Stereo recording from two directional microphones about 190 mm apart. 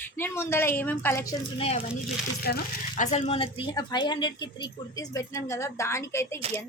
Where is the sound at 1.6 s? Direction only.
35° left (ahead or behind).